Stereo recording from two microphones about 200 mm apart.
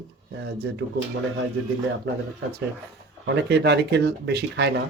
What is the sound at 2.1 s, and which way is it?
Speech, 55° right (ahead or behind).